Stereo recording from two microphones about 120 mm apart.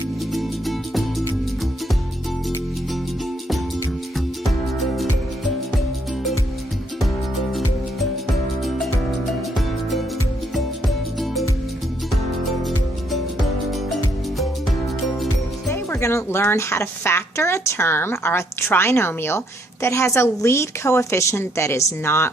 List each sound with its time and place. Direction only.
0.3 s music: centre (ahead or behind)
10.5 s music: centre (ahead or behind)
13.7 s music: centre (ahead or behind)
15.7 s speech: 25° left (ahead or behind)